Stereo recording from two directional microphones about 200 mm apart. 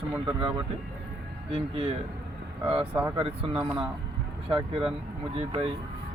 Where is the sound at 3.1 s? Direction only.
25° right (ahead or behind).